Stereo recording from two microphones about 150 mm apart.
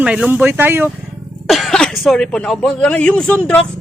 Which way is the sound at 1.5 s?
Centre (ahead or behind).